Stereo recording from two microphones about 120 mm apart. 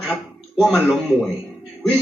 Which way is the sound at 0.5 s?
Centre (ahead or behind).